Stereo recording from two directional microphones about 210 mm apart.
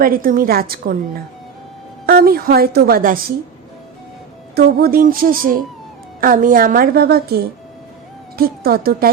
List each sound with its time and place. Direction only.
0.0 s a woman's voice: 45° right (ahead or behind)
2.0 s a woman's voice: 45° right (ahead or behind)
4.5 s a woman's voice: 45° right (ahead or behind)